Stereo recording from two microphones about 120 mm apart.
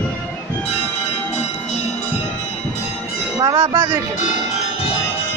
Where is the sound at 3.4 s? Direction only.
30° right (ahead or behind).